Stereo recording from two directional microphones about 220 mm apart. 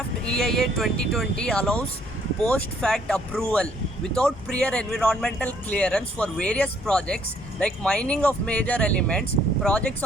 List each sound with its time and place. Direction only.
0.3 s speech: centre (ahead or behind)